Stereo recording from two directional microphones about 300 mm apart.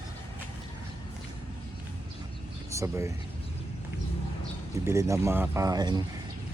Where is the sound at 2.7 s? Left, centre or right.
Centre.